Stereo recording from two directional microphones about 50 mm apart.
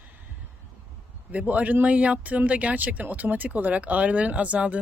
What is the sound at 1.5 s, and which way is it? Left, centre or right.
Speech, right.